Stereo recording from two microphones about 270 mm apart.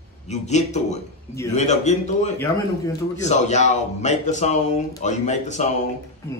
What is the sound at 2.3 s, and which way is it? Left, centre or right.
Speech, centre.